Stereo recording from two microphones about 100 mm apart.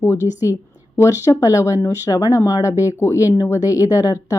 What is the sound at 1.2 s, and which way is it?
A woman's voice, 30° left (ahead or behind).